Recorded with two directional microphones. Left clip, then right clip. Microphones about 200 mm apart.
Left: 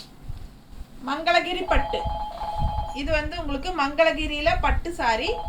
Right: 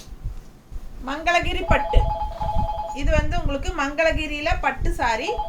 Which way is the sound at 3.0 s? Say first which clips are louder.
Even; 10° right (ahead or behind).